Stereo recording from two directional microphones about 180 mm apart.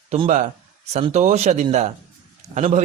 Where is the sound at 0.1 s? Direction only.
35° right (ahead or behind).